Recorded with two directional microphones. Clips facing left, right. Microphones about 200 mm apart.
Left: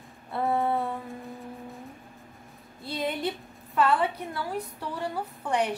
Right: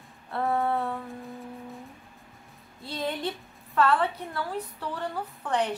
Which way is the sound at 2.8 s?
10° left (ahead or behind).